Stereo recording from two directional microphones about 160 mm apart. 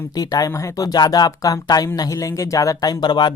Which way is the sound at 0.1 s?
25° left (ahead or behind).